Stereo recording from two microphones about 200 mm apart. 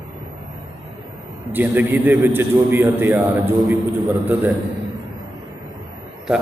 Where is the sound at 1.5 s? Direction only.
10° right (ahead or behind).